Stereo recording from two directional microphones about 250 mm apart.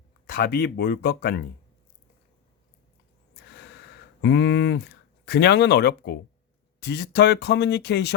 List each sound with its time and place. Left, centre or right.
0.3 s speech: left
3.5 s a sound: left
6.7 s speech: left